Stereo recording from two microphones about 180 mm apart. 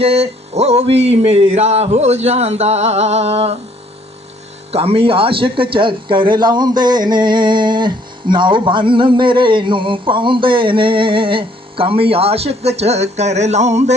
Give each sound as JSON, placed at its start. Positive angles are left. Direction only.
{"t": 0.0, "sound": "speech", "side_deg": -35}
{"t": 4.7, "sound": "speech", "side_deg": -35}